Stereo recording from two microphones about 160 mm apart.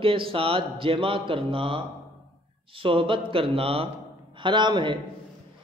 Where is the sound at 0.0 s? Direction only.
35° right (ahead or behind).